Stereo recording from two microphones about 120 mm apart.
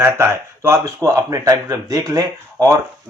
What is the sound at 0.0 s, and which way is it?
Speech, 20° right (ahead or behind).